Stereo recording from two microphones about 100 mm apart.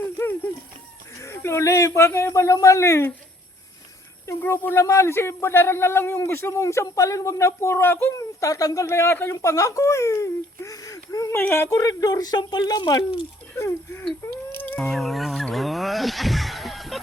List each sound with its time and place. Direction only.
1.2 s speech: 25° left (ahead or behind)
4.3 s speech: 25° left (ahead or behind)
9.4 s speech: 30° left (ahead or behind)
11.3 s speech: 25° left (ahead or behind)
11.7 s speech: 40° left (ahead or behind)
13.6 s speech: 25° left (ahead or behind)
14.5 s a sound: 20° left (ahead or behind)
14.8 s a sound: centre (ahead or behind)